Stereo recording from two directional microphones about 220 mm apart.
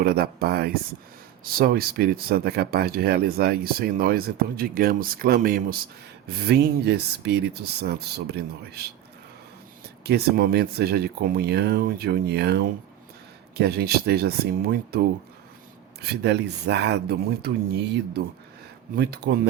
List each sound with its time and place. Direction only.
0.0 s speech: 45° right (ahead or behind)
10.0 s speech: 45° right (ahead or behind)
18.9 s speech: 45° right (ahead or behind)